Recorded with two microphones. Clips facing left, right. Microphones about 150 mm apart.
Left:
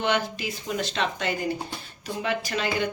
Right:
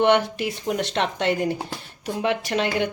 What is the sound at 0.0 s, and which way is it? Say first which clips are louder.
Speech: right 7 dB; 65° right (ahead or behind).